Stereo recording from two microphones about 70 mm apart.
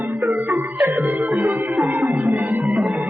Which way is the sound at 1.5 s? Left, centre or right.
Right.